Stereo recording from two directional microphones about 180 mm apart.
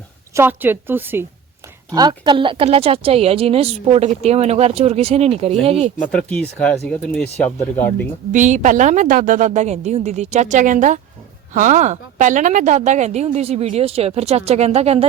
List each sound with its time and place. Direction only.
0.3 s speech: 10° right (ahead or behind)
1.9 s a woman's voice: 25° right (ahead or behind)
6.0 s speech: 5° left (ahead or behind)
8.3 s a woman's voice: 45° right (ahead or behind)